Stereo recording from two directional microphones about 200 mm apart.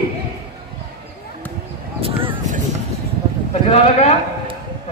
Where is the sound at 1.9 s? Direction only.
30° right (ahead or behind).